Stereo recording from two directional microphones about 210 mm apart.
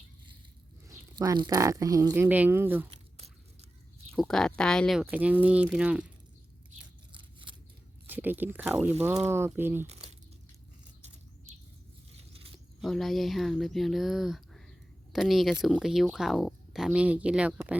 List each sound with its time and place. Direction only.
0.9 s speech: 15° right (ahead or behind)
2.9 s a sound: 30° right (ahead or behind)
4.1 s speech: centre (ahead or behind)
7.1 s scissors: 25° right (ahead or behind)
8.0 s speech: 10° right (ahead or behind)
9.8 s crumpling: 30° right (ahead or behind)
12.1 s scissors: 25° right (ahead or behind)
12.8 s speech: centre (ahead or behind)